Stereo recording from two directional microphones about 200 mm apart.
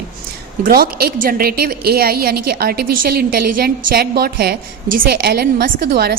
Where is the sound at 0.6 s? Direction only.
50° right (ahead or behind).